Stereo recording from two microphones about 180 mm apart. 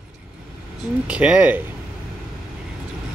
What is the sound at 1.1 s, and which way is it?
Speech, 5° right (ahead or behind).